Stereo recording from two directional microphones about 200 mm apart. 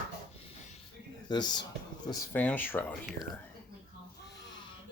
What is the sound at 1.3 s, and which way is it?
Speech, 20° left (ahead or behind).